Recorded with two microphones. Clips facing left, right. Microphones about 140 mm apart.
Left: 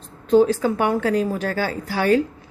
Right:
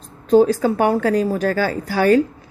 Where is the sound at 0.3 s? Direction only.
40° right (ahead or behind).